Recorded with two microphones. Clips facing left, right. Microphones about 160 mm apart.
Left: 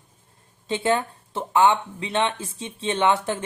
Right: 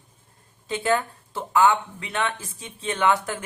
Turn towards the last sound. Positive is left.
turn(degrees=25)  # may be behind; listen again after turning